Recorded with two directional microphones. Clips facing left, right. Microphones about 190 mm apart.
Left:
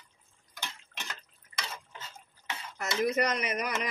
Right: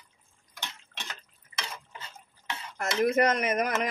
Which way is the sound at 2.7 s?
50° right (ahead or behind).